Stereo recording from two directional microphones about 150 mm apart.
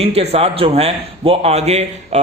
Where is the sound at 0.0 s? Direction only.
45° right (ahead or behind).